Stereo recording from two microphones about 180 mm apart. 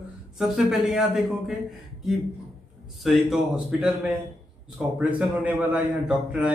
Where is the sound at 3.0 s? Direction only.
Centre (ahead or behind).